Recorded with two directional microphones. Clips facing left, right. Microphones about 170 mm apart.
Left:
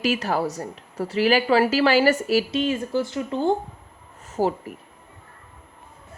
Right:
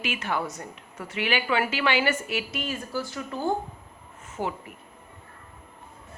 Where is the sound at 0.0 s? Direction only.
40° left (ahead or behind).